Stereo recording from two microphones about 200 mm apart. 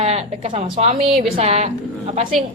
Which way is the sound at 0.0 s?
30° right (ahead or behind).